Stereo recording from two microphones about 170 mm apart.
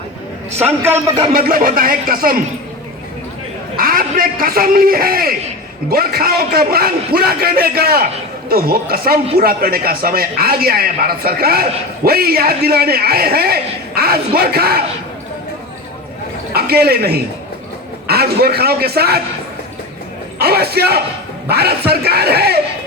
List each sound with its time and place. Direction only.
0.6 s a man's voice: 15° right (ahead or behind)
1.3 s speech: 55° right (ahead or behind)
3.8 s a man's voice: 60° right (ahead or behind)
16.6 s a man's voice: 65° right (ahead or behind)
20.4 s a man's voice: 70° right (ahead or behind)